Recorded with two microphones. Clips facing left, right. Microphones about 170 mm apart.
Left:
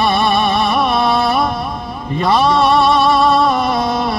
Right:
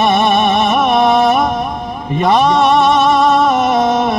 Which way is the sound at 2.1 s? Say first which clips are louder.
Right 2 dB; 20° right (ahead or behind).